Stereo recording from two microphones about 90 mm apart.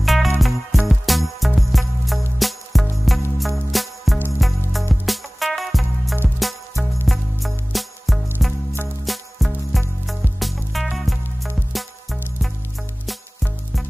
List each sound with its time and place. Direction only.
0.0 s music: centre (ahead or behind)